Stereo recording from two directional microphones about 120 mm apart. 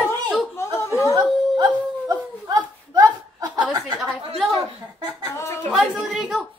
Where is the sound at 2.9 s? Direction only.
35° right (ahead or behind).